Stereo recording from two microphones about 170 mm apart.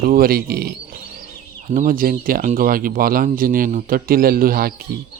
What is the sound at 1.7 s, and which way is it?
Speech, 55° right (ahead or behind).